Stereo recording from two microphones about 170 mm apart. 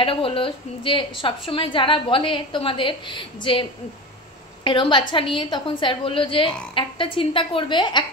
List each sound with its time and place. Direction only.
0.0 s a woman's voice: 30° left (ahead or behind)
4.6 s a woman's voice: 25° left (ahead or behind)